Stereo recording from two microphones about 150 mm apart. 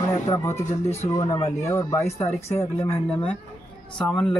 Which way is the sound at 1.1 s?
20° left (ahead or behind).